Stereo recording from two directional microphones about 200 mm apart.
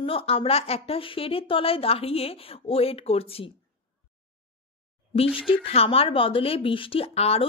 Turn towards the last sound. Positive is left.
turn(degrees=30)  # may be behind; listen again after turning